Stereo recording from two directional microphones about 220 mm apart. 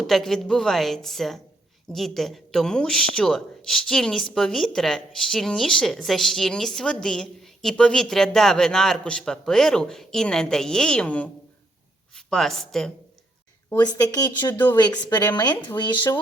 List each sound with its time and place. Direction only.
0.0 s speech: centre (ahead or behind)
13.7 s speech: 15° left (ahead or behind)